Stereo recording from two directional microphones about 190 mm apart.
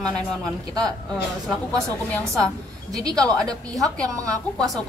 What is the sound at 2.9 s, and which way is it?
Speech, 20° right (ahead or behind).